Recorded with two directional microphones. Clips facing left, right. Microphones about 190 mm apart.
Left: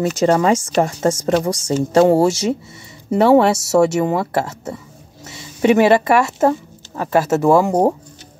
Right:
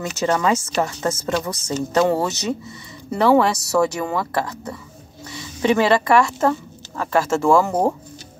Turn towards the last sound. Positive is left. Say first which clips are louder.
# left 3 dB
turn(degrees=15)  # may be behind; listen again after turning